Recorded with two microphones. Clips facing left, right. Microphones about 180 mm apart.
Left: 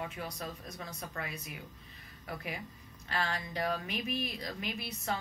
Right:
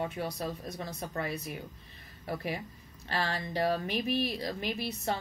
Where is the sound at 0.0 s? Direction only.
35° right (ahead or behind).